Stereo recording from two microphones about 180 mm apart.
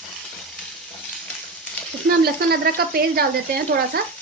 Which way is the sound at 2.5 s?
60° right (ahead or behind).